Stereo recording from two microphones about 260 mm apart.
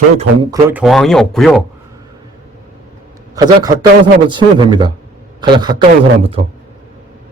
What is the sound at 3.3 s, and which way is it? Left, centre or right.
A man's voice, centre.